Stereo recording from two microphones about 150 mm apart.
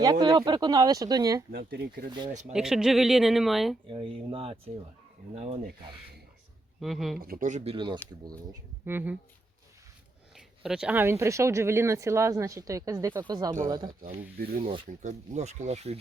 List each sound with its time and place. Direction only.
0.0 s speech: 25° right (ahead or behind)
1.5 s speech: 85° right
2.5 s speech: 5° right (ahead or behind)
3.8 s speech: 35° right (ahead or behind)
6.7 s speech: centre (ahead or behind)
7.2 s speech: 70° right (ahead or behind); by 7.9 s 35° right (ahead or behind)
8.8 s speech: 15° right (ahead or behind)
10.3 s speech: 5° right (ahead or behind); by 13.9 s 30° right (ahead or behind)
14.2 s speech: 80° right
14.8 s speech: 55° right (ahead or behind)